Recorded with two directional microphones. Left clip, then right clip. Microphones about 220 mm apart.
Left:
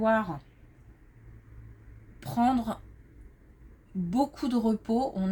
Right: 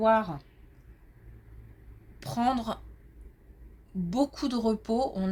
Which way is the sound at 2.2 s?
25° right (ahead or behind).